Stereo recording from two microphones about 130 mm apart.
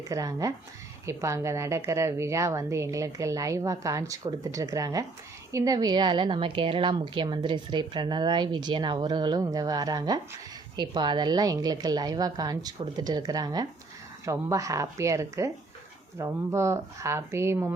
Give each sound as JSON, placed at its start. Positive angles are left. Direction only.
{"t": 0.1, "sound": "a woman's voice", "side_deg": -25}